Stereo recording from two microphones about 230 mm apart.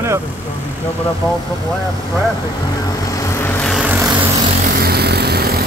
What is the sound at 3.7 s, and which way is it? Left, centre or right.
Vehicle, centre.